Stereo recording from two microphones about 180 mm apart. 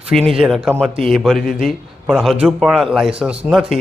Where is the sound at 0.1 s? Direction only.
Centre (ahead or behind).